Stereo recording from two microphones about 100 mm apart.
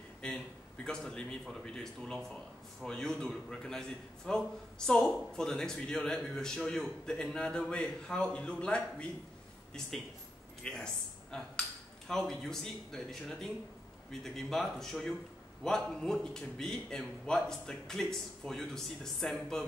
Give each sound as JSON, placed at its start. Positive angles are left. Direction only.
{"t": 0.2, "sound": "a sound", "side_deg": 10}
{"t": 0.8, "sound": "a man's voice", "side_deg": 10}
{"t": 10.6, "sound": "a man's voice", "side_deg": 10}